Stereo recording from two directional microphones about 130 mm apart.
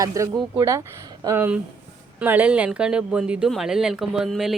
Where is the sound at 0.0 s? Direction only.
25° right (ahead or behind).